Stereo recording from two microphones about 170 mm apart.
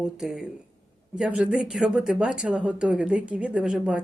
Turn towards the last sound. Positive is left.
turn(degrees=-5)  # may be behind; listen again after turning